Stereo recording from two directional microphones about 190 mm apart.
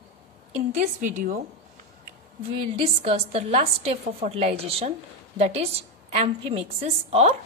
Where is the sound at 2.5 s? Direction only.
30° right (ahead or behind).